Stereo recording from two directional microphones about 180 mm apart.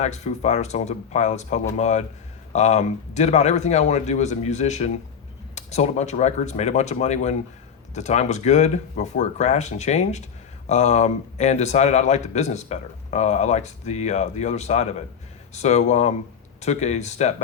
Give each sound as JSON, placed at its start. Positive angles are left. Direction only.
{"t": 0.0, "sound": "a man's voice", "side_deg": 40}